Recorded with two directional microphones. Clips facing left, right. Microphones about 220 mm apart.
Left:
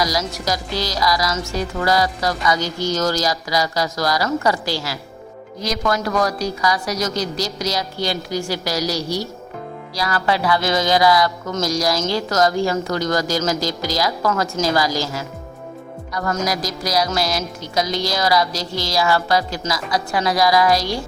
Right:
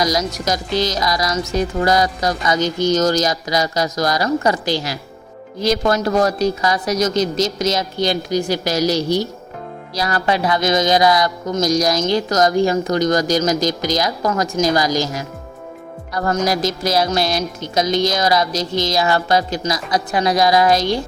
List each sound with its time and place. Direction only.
0.0 s music: 20° right (ahead or behind)
16.5 s music: 25° right (ahead or behind)